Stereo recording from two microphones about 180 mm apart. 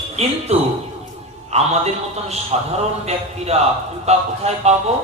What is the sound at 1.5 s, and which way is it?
A man's voice, 35° right (ahead or behind).